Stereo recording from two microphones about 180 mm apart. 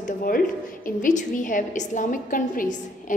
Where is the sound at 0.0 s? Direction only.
50° left (ahead or behind).